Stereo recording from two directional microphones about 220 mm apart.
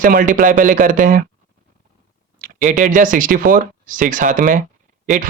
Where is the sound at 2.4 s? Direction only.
35° right (ahead or behind).